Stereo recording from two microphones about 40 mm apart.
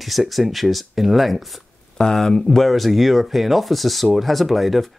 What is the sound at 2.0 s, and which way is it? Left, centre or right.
Speech, centre.